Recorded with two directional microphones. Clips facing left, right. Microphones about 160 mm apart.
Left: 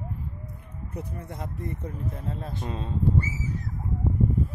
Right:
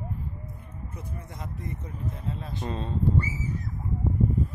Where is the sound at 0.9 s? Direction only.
60° left (ahead or behind).